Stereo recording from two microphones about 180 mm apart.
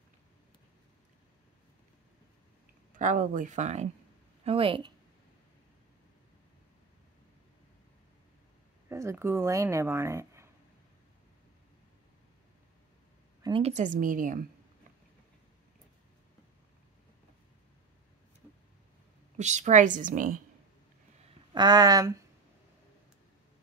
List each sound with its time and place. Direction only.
2.9 s a woman's voice: 45° right (ahead or behind); by 4.9 s 30° right (ahead or behind)
8.8 s speech: 15° right (ahead or behind)
13.4 s a woman's voice: 30° right (ahead or behind); by 14.4 s 45° right (ahead or behind)
19.3 s a woman's voice: 40° right (ahead or behind)
21.3 s speech: 25° right (ahead or behind)